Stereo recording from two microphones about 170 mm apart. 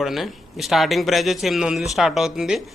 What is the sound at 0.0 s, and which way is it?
A man's voice, centre (ahead or behind).